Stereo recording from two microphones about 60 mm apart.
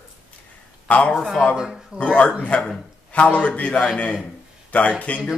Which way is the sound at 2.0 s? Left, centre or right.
Left.